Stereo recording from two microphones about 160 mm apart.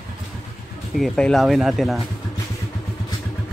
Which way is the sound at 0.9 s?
Centre (ahead or behind).